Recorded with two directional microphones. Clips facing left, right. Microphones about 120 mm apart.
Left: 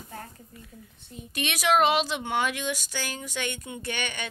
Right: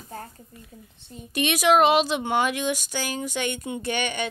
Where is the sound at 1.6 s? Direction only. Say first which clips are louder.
Right 4 dB; 15° right (ahead or behind).